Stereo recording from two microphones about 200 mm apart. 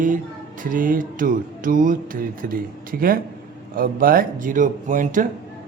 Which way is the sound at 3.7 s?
45° right (ahead or behind).